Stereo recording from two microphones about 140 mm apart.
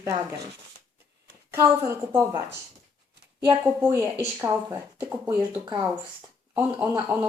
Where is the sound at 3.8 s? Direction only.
20° right (ahead or behind).